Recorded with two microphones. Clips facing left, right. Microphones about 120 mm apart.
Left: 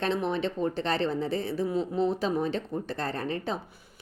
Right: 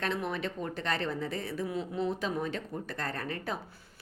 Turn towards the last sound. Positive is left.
turn(degrees=25)  # may be behind; listen again after turning